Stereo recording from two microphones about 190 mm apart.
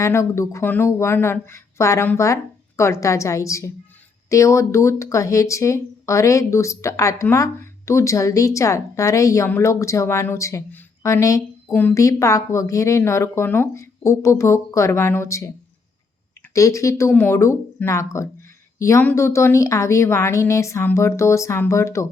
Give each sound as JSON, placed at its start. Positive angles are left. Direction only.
{"t": 0.0, "sound": "speech", "side_deg": 15}
{"t": 16.6, "sound": "speech", "side_deg": 15}